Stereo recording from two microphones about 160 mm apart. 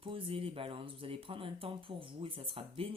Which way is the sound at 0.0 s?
35° right (ahead or behind).